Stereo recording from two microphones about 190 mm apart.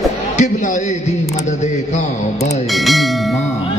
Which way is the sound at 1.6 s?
40° left (ahead or behind).